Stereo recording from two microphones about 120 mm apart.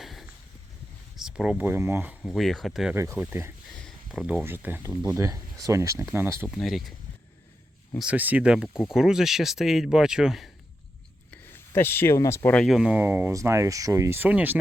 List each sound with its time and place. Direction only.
0.0 s a sound: centre (ahead or behind)
1.1 s speech: 5° right (ahead or behind)
2.2 s speech: centre (ahead or behind)
2.9 s speech: 20° right (ahead or behind)
3.8 s a sound: centre (ahead or behind)
4.4 s speech: 15° right (ahead or behind)
5.1 s speech: 25° right (ahead or behind)
6.5 s speech: centre (ahead or behind)
7.9 s speech: 10° right (ahead or behind)
11.7 s speech: 20° left (ahead or behind)
12.6 s speech: 5° right (ahead or behind); by 14.2 s 25° right (ahead or behind)
14.2 s speech: 15° right (ahead or behind)